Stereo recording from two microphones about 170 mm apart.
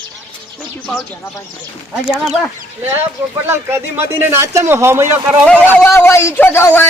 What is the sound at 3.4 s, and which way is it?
Speech, 15° right (ahead or behind).